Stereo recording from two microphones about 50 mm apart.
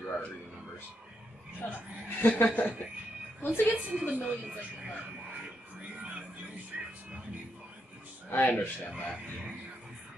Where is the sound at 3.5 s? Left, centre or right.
Right.